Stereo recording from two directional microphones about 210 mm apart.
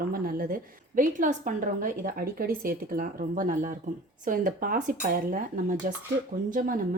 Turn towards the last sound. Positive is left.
turn(degrees=-40)  # may be behind; listen again after turning